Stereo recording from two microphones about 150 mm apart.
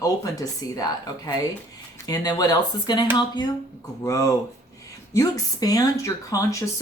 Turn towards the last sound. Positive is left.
turn(degrees=20)  # may be behind; listen again after turning